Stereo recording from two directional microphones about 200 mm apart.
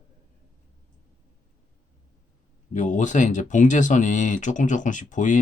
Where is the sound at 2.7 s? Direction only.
40° left (ahead or behind).